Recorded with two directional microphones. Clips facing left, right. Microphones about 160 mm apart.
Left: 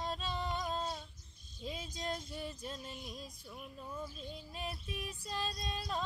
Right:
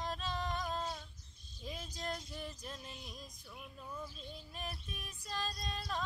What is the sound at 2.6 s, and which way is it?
Female singing, 25° left (ahead or behind).